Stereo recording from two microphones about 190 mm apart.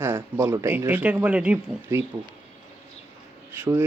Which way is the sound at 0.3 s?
10° right (ahead or behind).